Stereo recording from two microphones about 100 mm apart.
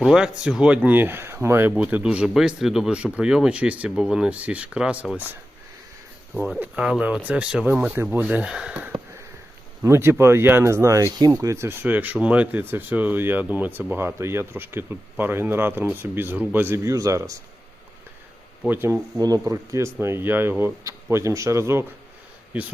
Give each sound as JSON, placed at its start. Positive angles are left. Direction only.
{"t": 0.0, "sound": "speech", "side_deg": -5}
{"t": 6.3, "sound": "speech", "side_deg": 0}
{"t": 6.6, "sound": "speech", "side_deg": -10}
{"t": 9.8, "sound": "speech", "side_deg": -25}
{"t": 18.7, "sound": "speech", "side_deg": -20}
{"t": 19.2, "sound": "speech", "side_deg": -35}